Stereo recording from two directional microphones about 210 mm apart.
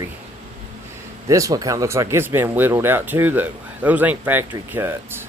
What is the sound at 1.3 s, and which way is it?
Speech, 15° right (ahead or behind).